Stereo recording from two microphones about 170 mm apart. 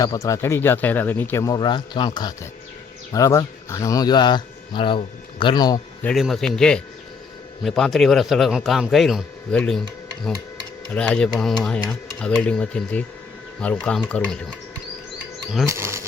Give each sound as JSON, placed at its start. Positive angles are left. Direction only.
{"t": 0.0, "sound": "speech", "side_deg": 20}
{"t": 6.0, "sound": "a man's voice", "side_deg": 5}
{"t": 10.9, "sound": "a man's voice", "side_deg": 5}
{"t": 15.6, "sound": "speech", "side_deg": -15}